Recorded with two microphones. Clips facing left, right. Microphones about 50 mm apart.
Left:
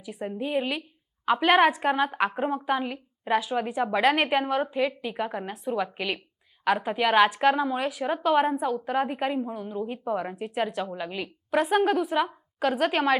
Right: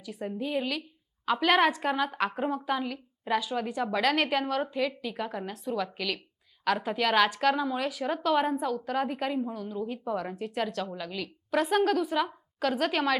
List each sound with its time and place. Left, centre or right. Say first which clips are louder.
0.0 s a woman's voice: left 2 dB; centre